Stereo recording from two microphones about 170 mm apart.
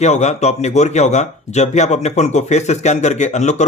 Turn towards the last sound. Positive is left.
turn(degrees=45)  # may be behind; listen again after turning